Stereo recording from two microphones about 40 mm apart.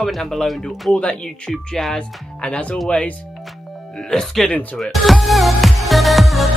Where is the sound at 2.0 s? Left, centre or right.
Left.